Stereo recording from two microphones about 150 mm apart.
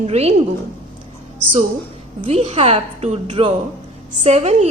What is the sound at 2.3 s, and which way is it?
A woman's voice, 45° right (ahead or behind).